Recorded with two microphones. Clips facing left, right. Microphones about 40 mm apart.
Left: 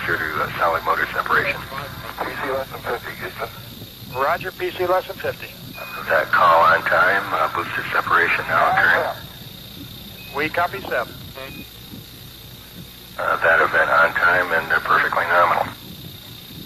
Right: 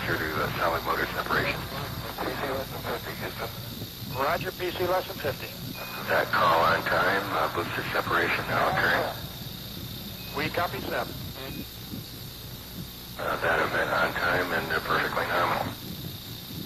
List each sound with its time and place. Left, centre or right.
0.0 s speech: left
6.3 s speech: left
10.3 s speech: left
13.2 s speech: left